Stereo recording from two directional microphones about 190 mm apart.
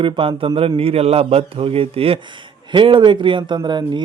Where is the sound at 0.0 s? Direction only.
30° right (ahead or behind).